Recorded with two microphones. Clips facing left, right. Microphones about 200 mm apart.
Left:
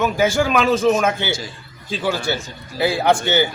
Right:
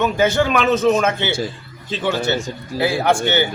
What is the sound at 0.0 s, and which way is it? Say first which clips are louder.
A man's voice: right 1 dB; 10° left (ahead or behind).